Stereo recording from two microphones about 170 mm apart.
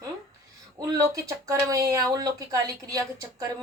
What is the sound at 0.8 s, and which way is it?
Speech, 20° right (ahead or behind).